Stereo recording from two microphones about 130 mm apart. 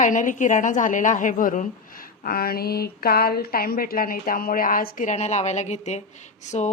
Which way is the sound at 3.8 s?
90° left.